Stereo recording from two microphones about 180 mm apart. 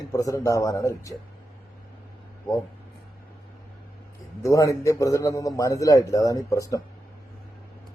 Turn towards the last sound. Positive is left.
turn(degrees=20)  # may be behind; listen again after turning